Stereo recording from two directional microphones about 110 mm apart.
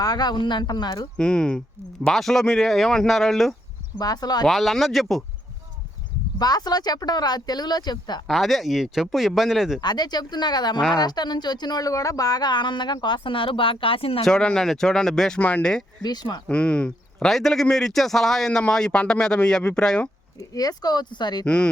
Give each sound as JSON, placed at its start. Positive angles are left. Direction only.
{"t": 0.0, "sound": "speech", "side_deg": 40}
{"t": 1.1, "sound": "a man's voice", "side_deg": 5}
{"t": 3.9, "sound": "speech", "side_deg": 35}
{"t": 4.4, "sound": "speech", "side_deg": 0}
{"t": 6.4, "sound": "speech", "side_deg": 40}
{"t": 8.3, "sound": "speech", "side_deg": 0}
{"t": 9.8, "sound": "speech", "side_deg": 40}
{"t": 14.3, "sound": "speech", "side_deg": 5}
{"t": 16.0, "sound": "speech", "side_deg": 40}
{"t": 16.5, "sound": "a man's voice", "side_deg": 10}
{"t": 20.4, "sound": "speech", "side_deg": 35}
{"t": 21.4, "sound": "a man's voice", "side_deg": 10}